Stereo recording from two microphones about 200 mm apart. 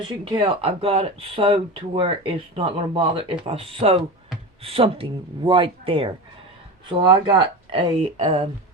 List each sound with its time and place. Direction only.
0.0 s speech: 25° right (ahead or behind)